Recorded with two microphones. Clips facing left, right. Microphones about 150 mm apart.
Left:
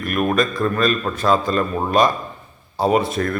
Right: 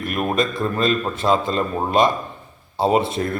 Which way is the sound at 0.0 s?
25° right (ahead or behind).